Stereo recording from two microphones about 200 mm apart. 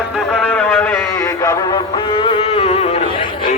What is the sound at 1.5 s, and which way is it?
Music, 25° left (ahead or behind).